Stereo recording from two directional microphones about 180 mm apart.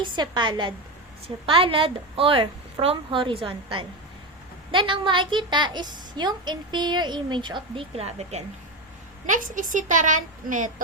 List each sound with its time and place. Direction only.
0.0 s a woman's voice: 25° right (ahead or behind); by 10.7 s 45° right (ahead or behind)